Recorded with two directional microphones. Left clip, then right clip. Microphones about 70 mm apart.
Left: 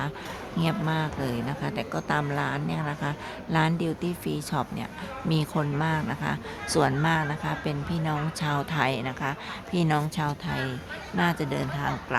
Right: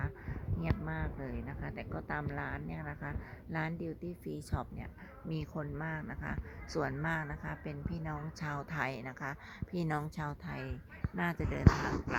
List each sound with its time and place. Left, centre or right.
0.6 s a woman's voice: centre
2.8 s speech: centre
5.4 s speech: centre
7.0 s speech: right
9.7 s speech: right